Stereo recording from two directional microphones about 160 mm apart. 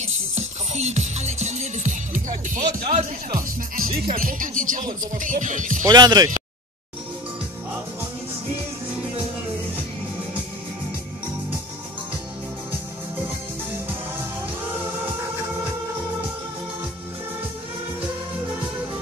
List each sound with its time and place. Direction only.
0.0 s music: 45° right (ahead or behind)
3.0 s speech: 60° right (ahead or behind)
5.9 s speech: 25° right (ahead or behind)